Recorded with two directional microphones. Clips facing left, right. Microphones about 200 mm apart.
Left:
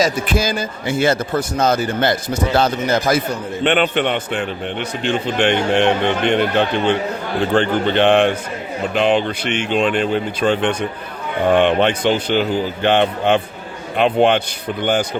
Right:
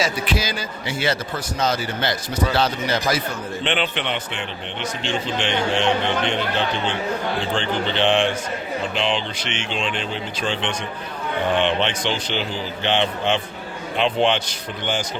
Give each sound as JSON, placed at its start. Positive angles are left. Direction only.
{"t": 0.0, "sound": "a man's voice", "side_deg": 50}